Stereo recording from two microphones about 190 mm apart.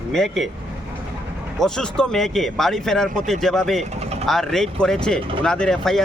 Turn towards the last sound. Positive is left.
turn(degrees=0)  # may be behind; listen again after turning